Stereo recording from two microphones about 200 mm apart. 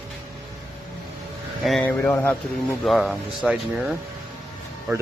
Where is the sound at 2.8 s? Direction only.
Centre (ahead or behind).